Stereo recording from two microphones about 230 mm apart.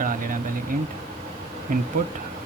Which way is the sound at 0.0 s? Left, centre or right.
Right.